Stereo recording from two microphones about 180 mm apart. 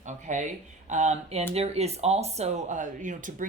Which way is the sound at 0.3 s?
40° right (ahead or behind).